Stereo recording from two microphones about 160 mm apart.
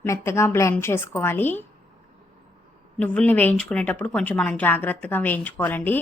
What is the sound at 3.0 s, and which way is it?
Speech, 10° left (ahead or behind).